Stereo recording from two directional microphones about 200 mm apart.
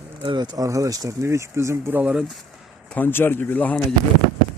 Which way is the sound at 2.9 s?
10° left (ahead or behind).